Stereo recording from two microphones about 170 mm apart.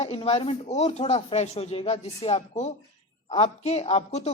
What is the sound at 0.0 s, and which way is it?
Speech, 35° left (ahead or behind).